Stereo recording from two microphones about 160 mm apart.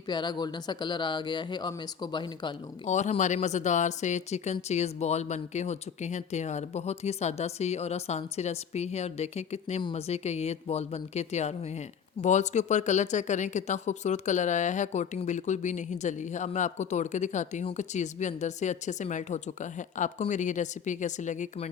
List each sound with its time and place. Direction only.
0.1 s speech: 25° left (ahead or behind)
2.8 s speech: 45° left (ahead or behind)